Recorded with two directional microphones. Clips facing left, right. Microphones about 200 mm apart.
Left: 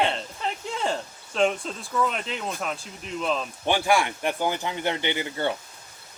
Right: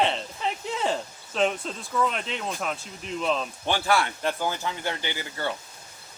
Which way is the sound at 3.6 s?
15° left (ahead or behind).